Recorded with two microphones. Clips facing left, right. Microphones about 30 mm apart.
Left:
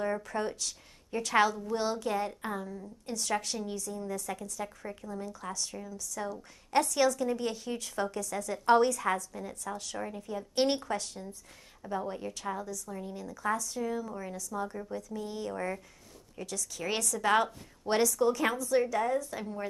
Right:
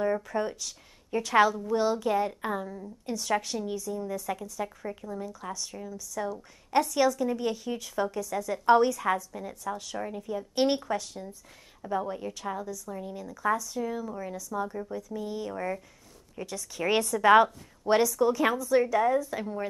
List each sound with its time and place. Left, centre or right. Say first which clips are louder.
0.0 s a woman's voice: right 4 dB; centre
8.2 s a woman's voice: right 4 dB; centre
14.7 s a woman's voice: right 3 dB; centre
15.0 s a woman's voice: right 2 dB; centre
16.4 s a woman's voice: even; right
16.8 s a woman's voice: right 8 dB; right
18.0 s a woman's voice: right 3 dB; centre